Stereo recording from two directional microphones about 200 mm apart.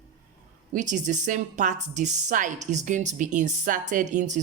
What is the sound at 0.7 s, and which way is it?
A woman's voice, 40° right (ahead or behind).